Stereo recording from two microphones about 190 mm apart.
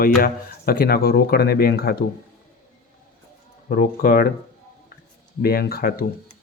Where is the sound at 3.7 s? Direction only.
55° left (ahead or behind).